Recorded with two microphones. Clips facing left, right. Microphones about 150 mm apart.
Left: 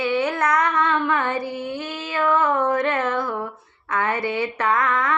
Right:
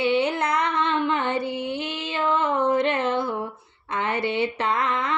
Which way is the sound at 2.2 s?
25° right (ahead or behind).